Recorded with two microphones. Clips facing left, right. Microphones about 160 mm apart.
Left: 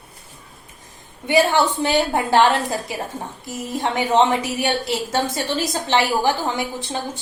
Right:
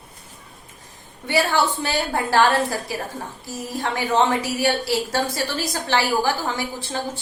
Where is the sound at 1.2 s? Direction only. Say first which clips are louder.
Left 4 dB; 20° left (ahead or behind).